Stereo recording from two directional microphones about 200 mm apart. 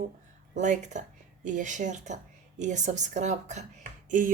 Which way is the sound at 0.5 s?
35° right (ahead or behind).